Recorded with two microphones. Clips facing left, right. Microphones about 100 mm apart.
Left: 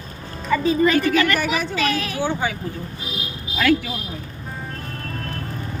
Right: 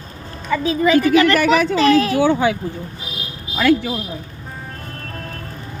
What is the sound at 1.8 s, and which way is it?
Speech, 35° right (ahead or behind).